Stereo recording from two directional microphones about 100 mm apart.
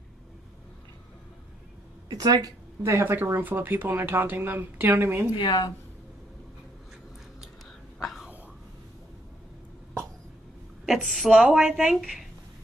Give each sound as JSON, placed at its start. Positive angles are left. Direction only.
{"t": 2.0, "sound": "speech", "side_deg": -40}
{"t": 2.8, "sound": "speech", "side_deg": -20}
{"t": 5.3, "sound": "speech", "side_deg": 55}
{"t": 8.0, "sound": "whispering", "side_deg": 0}
{"t": 10.9, "sound": "a woman's voice", "side_deg": 0}